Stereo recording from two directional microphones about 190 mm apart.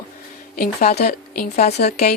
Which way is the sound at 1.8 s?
55° left (ahead or behind).